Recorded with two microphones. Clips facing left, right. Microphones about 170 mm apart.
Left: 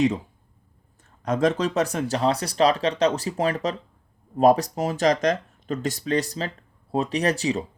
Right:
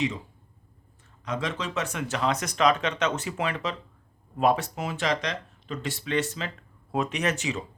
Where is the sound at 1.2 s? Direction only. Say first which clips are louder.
Left 9 dB; 45° left (ahead or behind).